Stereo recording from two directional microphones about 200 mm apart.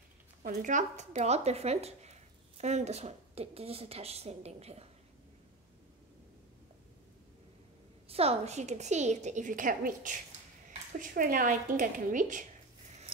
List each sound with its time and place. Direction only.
0.5 s speech: 40° right (ahead or behind)
8.1 s speech: 30° right (ahead or behind)